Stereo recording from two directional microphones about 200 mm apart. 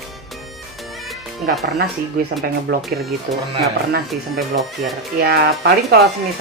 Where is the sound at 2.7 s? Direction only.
60° right (ahead or behind).